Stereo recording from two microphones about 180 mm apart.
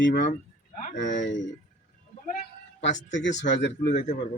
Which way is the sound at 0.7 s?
45° left (ahead or behind).